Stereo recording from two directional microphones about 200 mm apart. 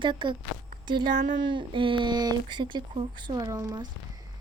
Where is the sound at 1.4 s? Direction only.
25° right (ahead or behind).